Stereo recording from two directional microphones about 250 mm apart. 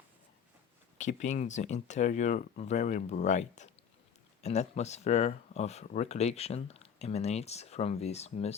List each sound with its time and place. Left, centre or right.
0.9 s speech: left